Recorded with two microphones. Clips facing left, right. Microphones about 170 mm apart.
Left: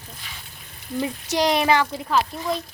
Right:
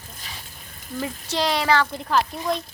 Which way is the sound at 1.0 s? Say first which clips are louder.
Left 3 dB; 15° left (ahead or behind).